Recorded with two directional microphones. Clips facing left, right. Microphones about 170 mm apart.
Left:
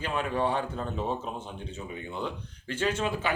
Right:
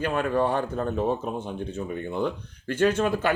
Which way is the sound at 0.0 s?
50° right (ahead or behind).